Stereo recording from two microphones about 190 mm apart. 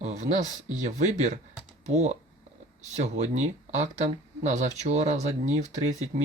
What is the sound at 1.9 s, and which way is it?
Speech, 35° right (ahead or behind).